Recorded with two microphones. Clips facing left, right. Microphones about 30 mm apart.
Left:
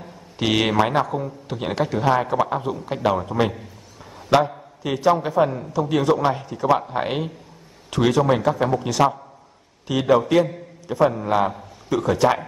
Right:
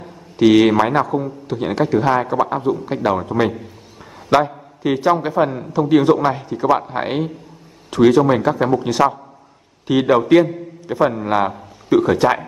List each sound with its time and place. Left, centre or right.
0.4 s a man's voice: centre
7.1 s a man's voice: centre
8.4 s a man's voice: centre
12.2 s a man's voice: centre